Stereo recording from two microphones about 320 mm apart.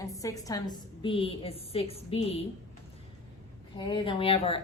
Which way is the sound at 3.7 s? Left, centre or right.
Centre.